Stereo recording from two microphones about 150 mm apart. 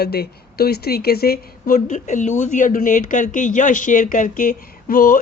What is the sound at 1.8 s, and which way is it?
Speech, 55° left (ahead or behind).